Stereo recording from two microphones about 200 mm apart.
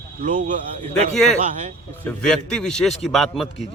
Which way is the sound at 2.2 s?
5° left (ahead or behind).